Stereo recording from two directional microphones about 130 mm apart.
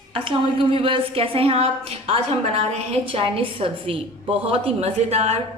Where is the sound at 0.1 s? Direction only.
45° right (ahead or behind).